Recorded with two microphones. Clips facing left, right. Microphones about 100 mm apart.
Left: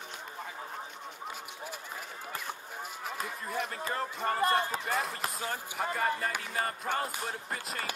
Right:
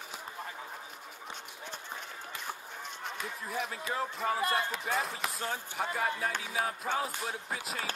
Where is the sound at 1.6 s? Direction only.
5° left (ahead or behind).